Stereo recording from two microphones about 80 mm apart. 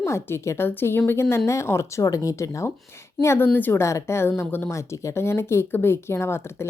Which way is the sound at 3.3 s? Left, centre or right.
Left.